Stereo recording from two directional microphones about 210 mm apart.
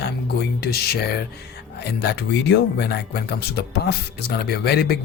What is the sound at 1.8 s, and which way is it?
Speech, 55° left (ahead or behind).